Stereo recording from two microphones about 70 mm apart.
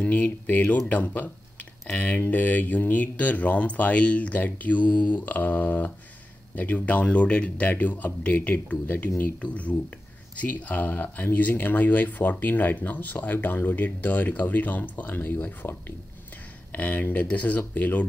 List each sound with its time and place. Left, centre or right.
0.0 s speech: left
16.7 s speech: left